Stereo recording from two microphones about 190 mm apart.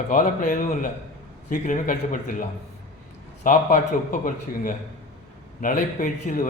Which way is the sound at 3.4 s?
45° left (ahead or behind).